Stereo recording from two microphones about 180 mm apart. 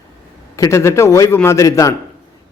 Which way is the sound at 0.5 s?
15° left (ahead or behind).